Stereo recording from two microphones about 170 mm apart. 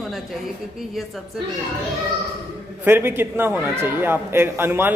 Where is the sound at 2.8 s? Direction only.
15° right (ahead or behind).